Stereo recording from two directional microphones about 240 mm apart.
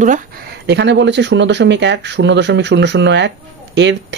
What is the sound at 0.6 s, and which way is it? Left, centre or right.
Speech, right.